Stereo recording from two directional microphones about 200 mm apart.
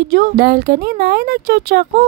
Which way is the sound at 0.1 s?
50° right (ahead or behind).